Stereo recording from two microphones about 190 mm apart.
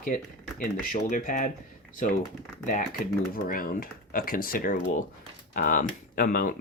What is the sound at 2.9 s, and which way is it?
Speech, 50° left (ahead or behind).